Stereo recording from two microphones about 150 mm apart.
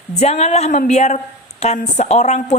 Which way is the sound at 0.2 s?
50° left (ahead or behind).